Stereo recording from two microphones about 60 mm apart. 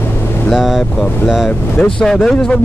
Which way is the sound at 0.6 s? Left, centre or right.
Centre.